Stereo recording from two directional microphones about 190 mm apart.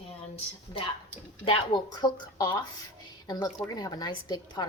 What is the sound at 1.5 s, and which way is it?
A child's voice, 25° left (ahead or behind).